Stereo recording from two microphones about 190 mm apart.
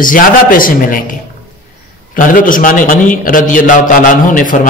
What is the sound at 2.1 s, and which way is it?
A man's voice, 45° left (ahead or behind).